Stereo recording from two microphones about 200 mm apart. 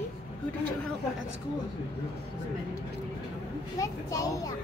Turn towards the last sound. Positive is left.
turn(degrees=15)  # may be behind; listen again after turning